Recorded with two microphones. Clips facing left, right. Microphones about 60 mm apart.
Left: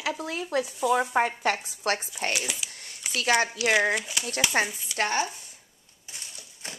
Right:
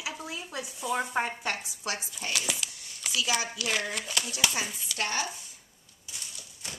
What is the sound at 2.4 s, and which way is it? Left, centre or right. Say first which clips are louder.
Speech: even; centre.